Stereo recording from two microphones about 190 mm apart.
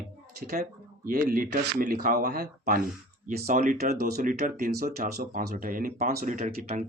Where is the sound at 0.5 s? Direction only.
50° right (ahead or behind).